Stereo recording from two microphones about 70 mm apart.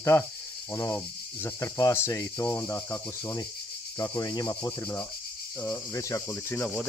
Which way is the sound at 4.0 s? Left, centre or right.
Left.